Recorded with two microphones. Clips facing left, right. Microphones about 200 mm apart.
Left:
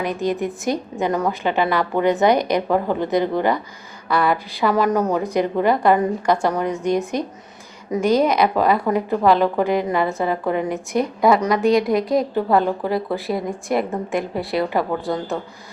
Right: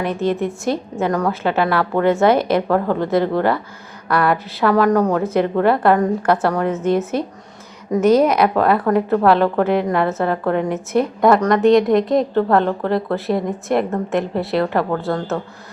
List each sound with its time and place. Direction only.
0.0 s a woman's voice: centre (ahead or behind)
14.9 s a woman's voice: 15° left (ahead or behind)